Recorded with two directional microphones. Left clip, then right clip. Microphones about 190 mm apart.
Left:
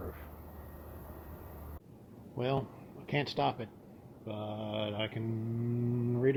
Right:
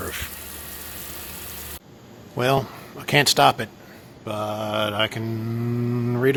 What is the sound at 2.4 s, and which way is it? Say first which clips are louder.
Speech: right 13 dB; 25° right (ahead or behind).